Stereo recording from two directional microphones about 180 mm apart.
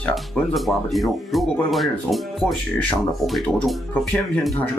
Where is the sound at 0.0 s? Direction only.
Centre (ahead or behind).